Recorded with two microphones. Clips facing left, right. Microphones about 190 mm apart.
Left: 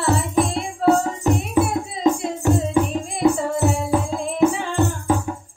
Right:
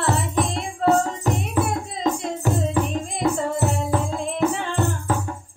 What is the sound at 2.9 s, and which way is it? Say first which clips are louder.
Music: left 4 dB; 5° left (ahead or behind).